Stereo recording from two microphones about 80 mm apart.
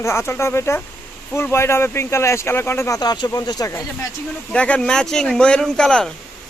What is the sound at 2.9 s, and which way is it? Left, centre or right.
Speech, left.